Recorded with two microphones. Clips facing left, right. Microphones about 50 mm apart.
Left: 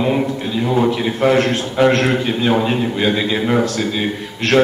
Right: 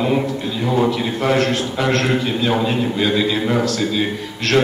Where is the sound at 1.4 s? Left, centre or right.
Centre.